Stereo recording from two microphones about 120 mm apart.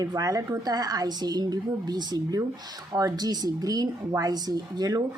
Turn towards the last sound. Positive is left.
turn(degrees=-30)  # may be behind; listen again after turning